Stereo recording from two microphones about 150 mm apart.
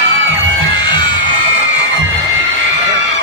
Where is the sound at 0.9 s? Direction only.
30° left (ahead or behind).